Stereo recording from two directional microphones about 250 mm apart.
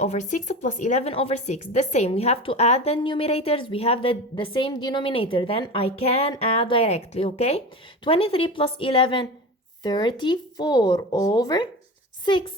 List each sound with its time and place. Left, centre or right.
0.0 s speech: left